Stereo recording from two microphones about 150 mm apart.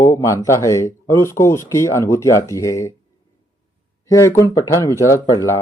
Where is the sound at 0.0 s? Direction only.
20° left (ahead or behind).